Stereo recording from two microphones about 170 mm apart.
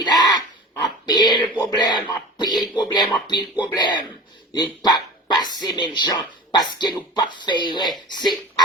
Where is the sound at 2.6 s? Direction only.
25° left (ahead or behind).